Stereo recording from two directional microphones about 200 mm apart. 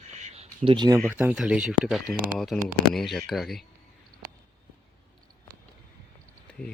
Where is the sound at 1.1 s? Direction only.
5° right (ahead or behind).